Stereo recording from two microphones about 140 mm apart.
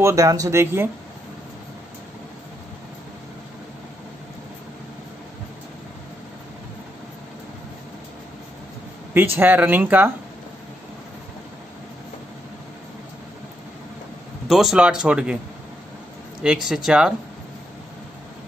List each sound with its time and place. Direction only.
0.0 s speech: 20° right (ahead or behind)
9.1 s speech: 15° right (ahead or behind)
14.5 s speech: 5° right (ahead or behind)
16.6 s speech: 5° right (ahead or behind)